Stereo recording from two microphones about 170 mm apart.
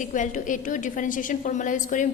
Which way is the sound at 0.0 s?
50° left (ahead or behind).